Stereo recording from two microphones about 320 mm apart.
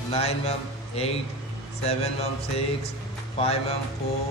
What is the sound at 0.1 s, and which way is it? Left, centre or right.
A man's voice, centre.